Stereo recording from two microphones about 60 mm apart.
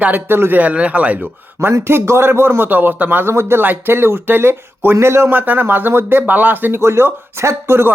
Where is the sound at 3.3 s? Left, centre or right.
Right.